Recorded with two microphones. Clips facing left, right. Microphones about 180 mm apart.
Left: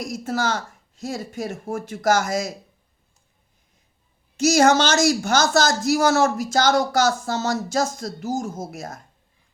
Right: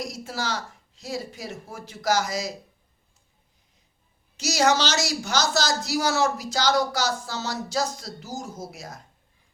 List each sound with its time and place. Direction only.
0.0 s speech: 50° left (ahead or behind)
4.4 s speech: 50° left (ahead or behind)